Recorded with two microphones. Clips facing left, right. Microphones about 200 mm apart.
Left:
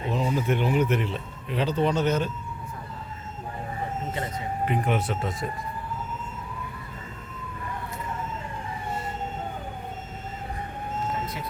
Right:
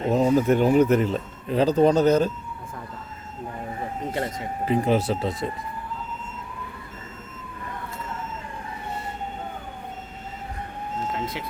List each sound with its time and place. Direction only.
0.1 s speech: 45° right (ahead or behind)
4.1 s speech: 75° right (ahead or behind)
4.7 s speech: 35° right (ahead or behind)